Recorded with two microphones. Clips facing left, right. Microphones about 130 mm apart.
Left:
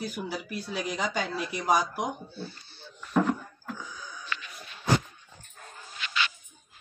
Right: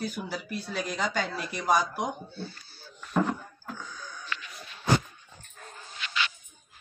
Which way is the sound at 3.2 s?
5° right (ahead or behind).